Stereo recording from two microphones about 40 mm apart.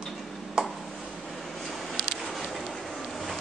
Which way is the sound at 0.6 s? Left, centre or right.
Centre.